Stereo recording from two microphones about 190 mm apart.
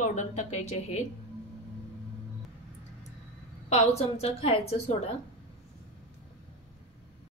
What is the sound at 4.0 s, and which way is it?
Speech, 30° left (ahead or behind).